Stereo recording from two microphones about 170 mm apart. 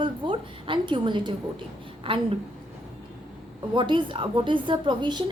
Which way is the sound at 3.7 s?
30° right (ahead or behind).